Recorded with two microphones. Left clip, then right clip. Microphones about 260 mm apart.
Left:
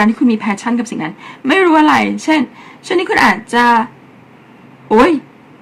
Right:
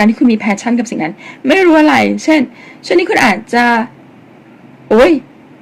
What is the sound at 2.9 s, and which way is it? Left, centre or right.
Speech, left.